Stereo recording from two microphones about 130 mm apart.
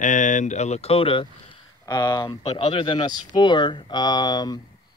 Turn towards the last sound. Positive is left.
turn(degrees=30)  # may be behind; listen again after turning